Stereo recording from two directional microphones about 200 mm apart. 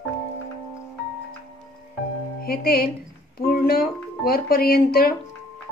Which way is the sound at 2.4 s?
50° left (ahead or behind).